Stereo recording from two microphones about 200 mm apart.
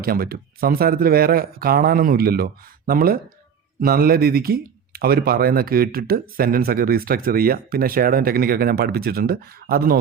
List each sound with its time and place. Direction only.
0.0 s speech: 50° right (ahead or behind)